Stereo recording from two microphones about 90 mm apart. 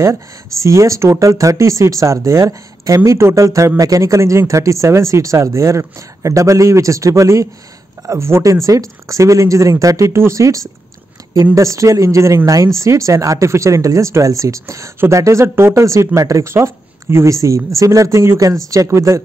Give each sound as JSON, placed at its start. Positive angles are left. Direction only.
{"t": 0.0, "sound": "speech", "side_deg": -35}